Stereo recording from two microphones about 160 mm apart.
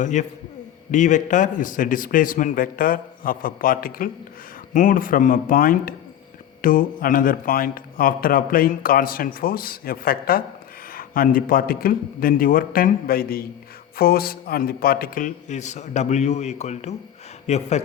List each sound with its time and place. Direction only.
0.0 s a man's voice: 50° left (ahead or behind)